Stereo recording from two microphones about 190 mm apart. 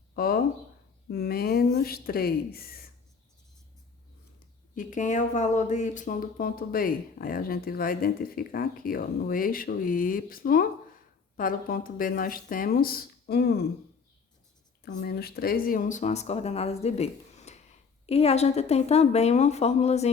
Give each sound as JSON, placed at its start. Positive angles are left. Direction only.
{"t": 0.2, "sound": "speech", "side_deg": 50}
{"t": 4.7, "sound": "speech", "side_deg": 45}
{"t": 14.8, "sound": "speech", "side_deg": 55}